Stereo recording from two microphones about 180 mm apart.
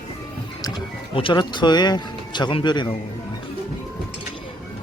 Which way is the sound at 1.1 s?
25° left (ahead or behind).